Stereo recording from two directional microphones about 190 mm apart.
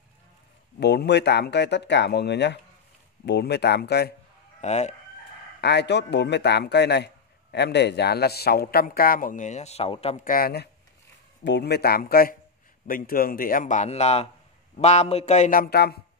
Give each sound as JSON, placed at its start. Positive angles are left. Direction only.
{"t": 0.7, "sound": "speech", "side_deg": 65}
{"t": 4.6, "sound": "speech", "side_deg": 35}
{"t": 5.6, "sound": "speech", "side_deg": 65}
{"t": 10.2, "sound": "speech", "side_deg": 50}